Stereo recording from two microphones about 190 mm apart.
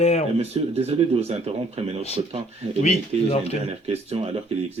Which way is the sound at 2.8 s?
35° left (ahead or behind).